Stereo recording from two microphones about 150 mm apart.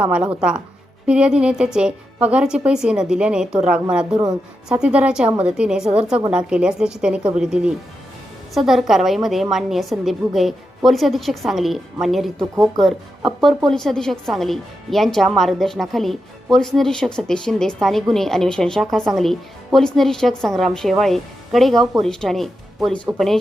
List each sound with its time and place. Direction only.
0.0 s a woman's voice: 5° right (ahead or behind)
4.7 s a woman's voice: 10° right (ahead or behind)
12.5 s speech: 20° right (ahead or behind)
12.8 s a woman's voice: centre (ahead or behind)